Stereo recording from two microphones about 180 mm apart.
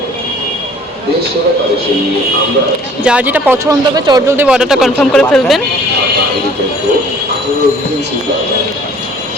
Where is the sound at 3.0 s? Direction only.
10° right (ahead or behind).